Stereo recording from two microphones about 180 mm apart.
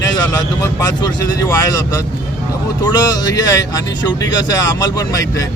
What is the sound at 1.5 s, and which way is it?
Speech, 20° left (ahead or behind).